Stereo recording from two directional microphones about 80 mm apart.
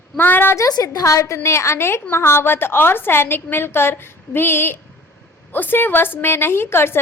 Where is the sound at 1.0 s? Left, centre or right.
Left.